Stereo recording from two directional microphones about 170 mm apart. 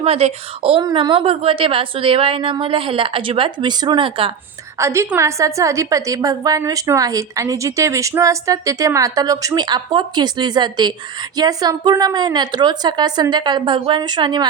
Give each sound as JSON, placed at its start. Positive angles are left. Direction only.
{"t": 0.0, "sound": "a woman's voice", "side_deg": -35}
{"t": 4.8, "sound": "a woman's voice", "side_deg": -15}